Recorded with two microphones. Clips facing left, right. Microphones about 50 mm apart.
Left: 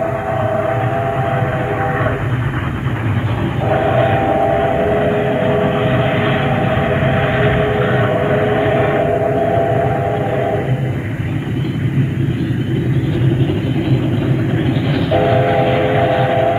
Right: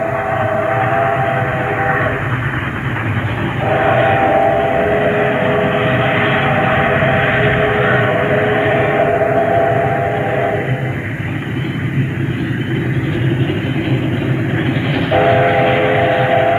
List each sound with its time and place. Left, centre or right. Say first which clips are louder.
0.3 s train: right 1 dB; right
0.7 s train: right 4 dB; right
3.6 s vehicle: right 2 dB; right
15.0 s train: right 3 dB; right